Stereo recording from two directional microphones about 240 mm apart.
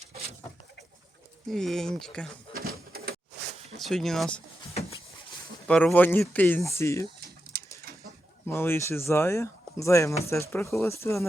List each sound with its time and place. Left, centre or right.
1.5 s speech: centre
2.5 s door: right
3.8 s speech: centre
5.6 s speech: centre
7.5 s pigeon: right
8.4 s speech: centre